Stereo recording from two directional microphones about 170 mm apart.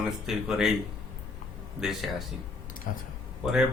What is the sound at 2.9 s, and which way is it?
Speech, 50° left (ahead or behind).